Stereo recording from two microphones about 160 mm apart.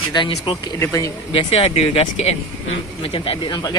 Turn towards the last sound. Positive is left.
turn(degrees=25)  # may be behind; listen again after turning